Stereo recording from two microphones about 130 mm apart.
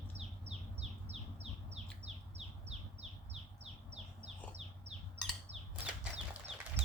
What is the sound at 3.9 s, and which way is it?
Bird, 55° right (ahead or behind).